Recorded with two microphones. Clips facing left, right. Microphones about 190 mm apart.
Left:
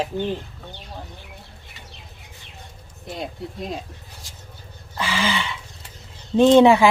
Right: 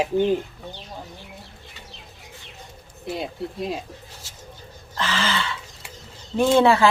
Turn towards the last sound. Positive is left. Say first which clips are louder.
# left 4 dB
turn(degrees=15)  # may be behind; listen again after turning